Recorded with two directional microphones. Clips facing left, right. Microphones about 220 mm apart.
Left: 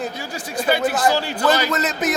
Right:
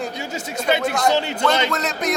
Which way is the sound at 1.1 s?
20° right (ahead or behind).